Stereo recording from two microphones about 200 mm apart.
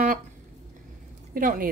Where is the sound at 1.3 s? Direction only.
45° right (ahead or behind).